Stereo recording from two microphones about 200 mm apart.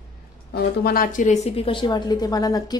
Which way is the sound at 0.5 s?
50° left (ahead or behind).